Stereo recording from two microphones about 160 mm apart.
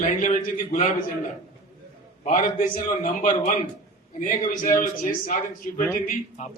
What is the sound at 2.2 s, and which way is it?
A man's voice, 55° left (ahead or behind).